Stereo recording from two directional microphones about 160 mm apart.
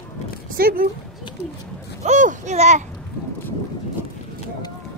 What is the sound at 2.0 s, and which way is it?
Speech, 50° right (ahead or behind).